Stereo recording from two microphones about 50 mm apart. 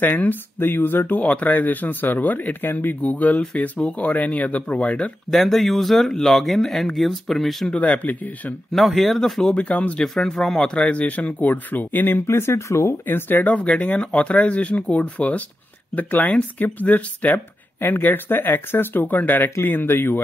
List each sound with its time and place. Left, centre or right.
0.0 s speech: left
1.2 s speech: left
5.3 s speech: centre
7.7 s speech: left
8.7 s speech: centre
9.6 s speech: left
9.9 s speech: centre
10.7 s speech: left
12.3 s speech: left
13.0 s speech: left
17.7 s speech: left
19.5 s speech: left